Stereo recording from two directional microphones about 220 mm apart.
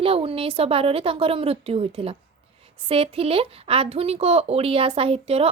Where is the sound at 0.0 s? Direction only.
25° right (ahead or behind).